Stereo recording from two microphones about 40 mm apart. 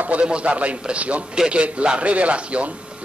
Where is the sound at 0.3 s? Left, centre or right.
Right.